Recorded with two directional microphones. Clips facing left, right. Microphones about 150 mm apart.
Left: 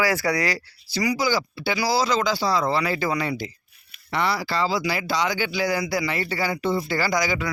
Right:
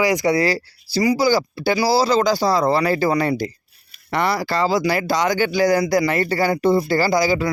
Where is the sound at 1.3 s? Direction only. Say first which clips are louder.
Right 6 dB; 40° right (ahead or behind).